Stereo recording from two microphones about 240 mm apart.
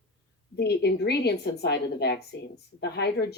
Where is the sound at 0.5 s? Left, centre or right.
Left.